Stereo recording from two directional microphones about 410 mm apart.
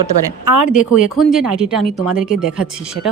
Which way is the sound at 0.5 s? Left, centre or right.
Right.